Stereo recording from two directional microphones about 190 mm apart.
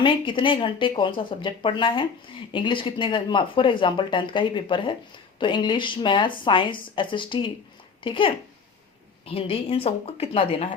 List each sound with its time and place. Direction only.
0.0 s speech: 25° left (ahead or behind)